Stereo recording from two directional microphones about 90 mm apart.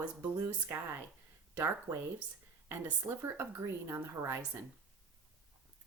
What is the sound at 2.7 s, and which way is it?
Speech, 30° right (ahead or behind).